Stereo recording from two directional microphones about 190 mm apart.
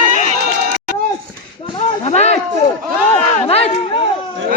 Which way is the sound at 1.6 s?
25° left (ahead or behind).